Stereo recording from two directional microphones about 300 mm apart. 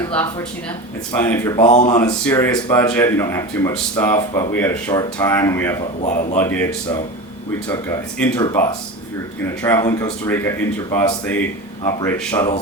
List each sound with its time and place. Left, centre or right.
0.1 s speech: centre
6.0 s a man's voice: left
6.4 s speech: centre
11.8 s speech: centre